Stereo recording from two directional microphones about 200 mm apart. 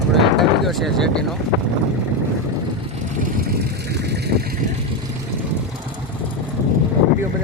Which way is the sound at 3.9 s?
55° right (ahead or behind).